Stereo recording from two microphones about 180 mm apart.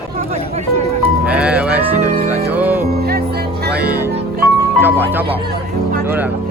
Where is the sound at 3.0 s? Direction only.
60° right (ahead or behind).